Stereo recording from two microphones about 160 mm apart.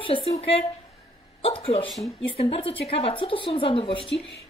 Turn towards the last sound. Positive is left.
turn(degrees=35)  # may be behind; listen again after turning